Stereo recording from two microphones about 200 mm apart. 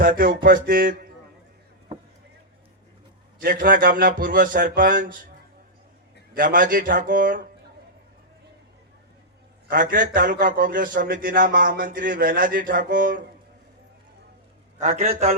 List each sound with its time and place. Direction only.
0.0 s a man's voice: 45° right (ahead or behind)
3.4 s a man's voice: 45° right (ahead or behind)
6.3 s a man's voice: 45° right (ahead or behind)
9.6 s a man's voice: 45° right (ahead or behind)
14.8 s a man's voice: 40° right (ahead or behind)